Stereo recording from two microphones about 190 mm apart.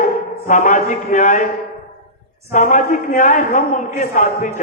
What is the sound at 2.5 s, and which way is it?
A man's voice, 45° left (ahead or behind).